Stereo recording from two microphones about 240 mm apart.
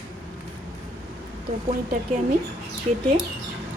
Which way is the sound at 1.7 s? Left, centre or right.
Right.